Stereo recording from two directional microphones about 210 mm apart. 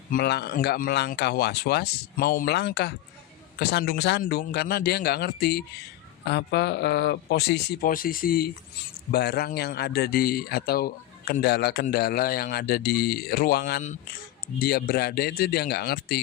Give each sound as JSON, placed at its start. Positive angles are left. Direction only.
{"t": 0.1, "sound": "speech", "side_deg": 50}